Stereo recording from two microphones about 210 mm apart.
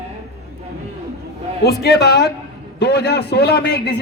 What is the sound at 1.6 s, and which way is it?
Speech, 50° left (ahead or behind).